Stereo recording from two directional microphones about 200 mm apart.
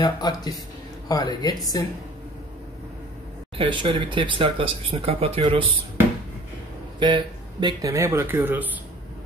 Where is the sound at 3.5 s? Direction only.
25° right (ahead or behind).